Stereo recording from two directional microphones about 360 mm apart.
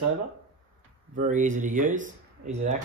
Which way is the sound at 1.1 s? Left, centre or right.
Right.